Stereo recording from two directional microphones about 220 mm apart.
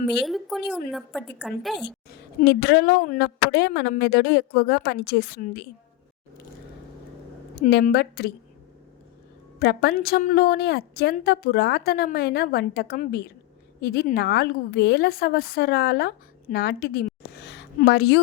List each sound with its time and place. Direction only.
0.1 s a woman's voice: centre (ahead or behind)
2.4 s a woman's voice: 50° left (ahead or behind)
7.5 s a woman's voice: 45° left (ahead or behind)
9.6 s a woman's voice: 45° left (ahead or behind)